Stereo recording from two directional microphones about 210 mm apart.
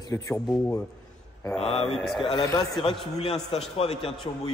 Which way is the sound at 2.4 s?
15° left (ahead or behind).